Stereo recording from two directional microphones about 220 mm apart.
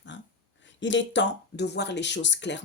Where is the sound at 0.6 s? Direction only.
55° left (ahead or behind).